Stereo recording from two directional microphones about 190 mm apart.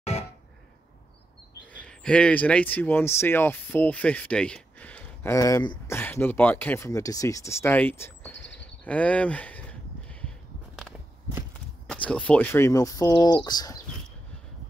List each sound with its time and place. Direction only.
0.1 s a sound: 35° left (ahead or behind)
1.7 s speech: 5° left (ahead or behind)
11.9 s speech: 5° left (ahead or behind)